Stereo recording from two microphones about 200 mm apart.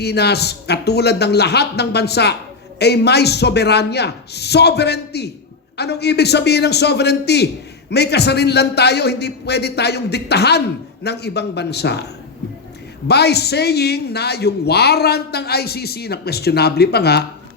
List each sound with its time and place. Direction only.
0.0 s a man's voice: 55° left (ahead or behind)
13.1 s speech: 55° left (ahead or behind)